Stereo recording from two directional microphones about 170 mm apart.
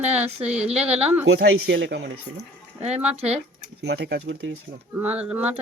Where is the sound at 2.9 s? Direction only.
5° right (ahead or behind).